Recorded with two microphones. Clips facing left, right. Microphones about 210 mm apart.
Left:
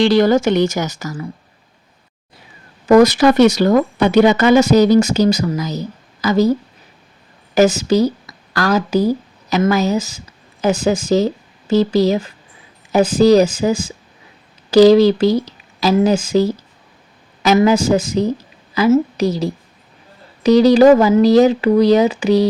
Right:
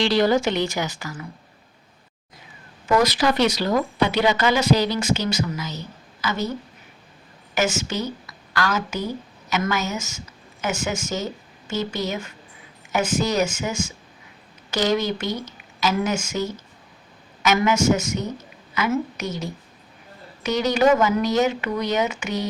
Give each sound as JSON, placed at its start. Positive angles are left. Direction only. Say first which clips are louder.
{"t": 0.0, "sound": "speech", "louder": "left 7 dB", "side_deg": 50}
{"t": 2.8, "sound": "a woman's voice", "louder": "left 10 dB", "side_deg": 50}